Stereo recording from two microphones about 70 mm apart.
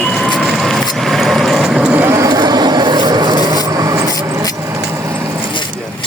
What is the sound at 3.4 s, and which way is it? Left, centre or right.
Rub, right.